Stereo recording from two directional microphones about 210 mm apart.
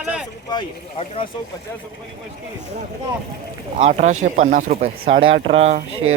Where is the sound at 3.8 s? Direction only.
30° right (ahead or behind).